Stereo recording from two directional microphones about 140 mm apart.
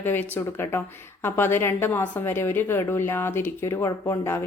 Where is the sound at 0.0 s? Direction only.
15° left (ahead or behind).